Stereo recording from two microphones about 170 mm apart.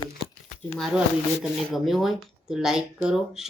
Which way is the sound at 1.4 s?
Centre (ahead or behind).